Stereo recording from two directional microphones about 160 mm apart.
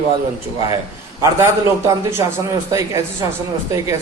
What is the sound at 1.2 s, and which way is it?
A man's voice, 20° right (ahead or behind).